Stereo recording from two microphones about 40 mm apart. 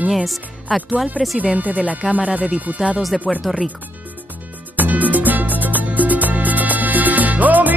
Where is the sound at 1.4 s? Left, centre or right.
Right.